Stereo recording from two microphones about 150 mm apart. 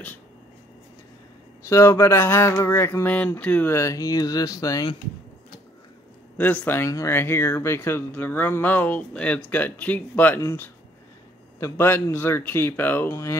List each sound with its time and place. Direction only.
1.7 s speech: 20° left (ahead or behind)
6.3 s speech: 10° left (ahead or behind)